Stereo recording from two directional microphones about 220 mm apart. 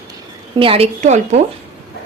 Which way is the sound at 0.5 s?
25° right (ahead or behind).